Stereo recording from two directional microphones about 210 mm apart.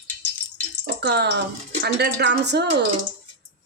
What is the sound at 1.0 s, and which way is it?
A woman's voice, 50° right (ahead or behind).